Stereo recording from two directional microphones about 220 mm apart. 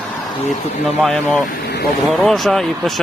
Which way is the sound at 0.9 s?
5° left (ahead or behind).